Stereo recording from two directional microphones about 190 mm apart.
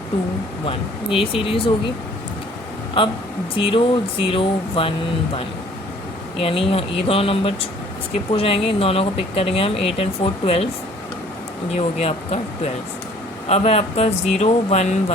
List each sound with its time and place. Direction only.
0.7 s speech: 30° left (ahead or behind)
3.0 s speech: 30° left (ahead or behind)
6.4 s speech: 30° left (ahead or behind)
11.7 s speech: 35° left (ahead or behind)
13.5 s speech: 35° left (ahead or behind)